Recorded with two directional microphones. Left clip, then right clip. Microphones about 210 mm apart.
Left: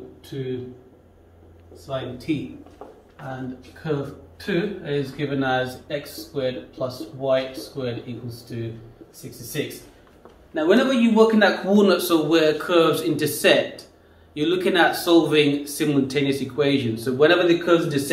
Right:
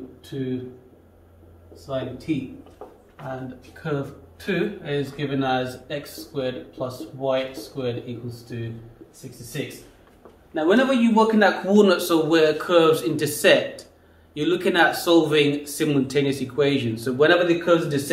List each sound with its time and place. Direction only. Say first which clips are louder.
1.9 s speech: even; 15° right (ahead or behind)
4.5 s speech: even; 25° right (ahead or behind)
10.5 s speech: even; 10° right (ahead or behind)